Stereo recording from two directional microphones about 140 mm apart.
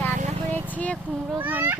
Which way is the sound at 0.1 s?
60° right (ahead or behind).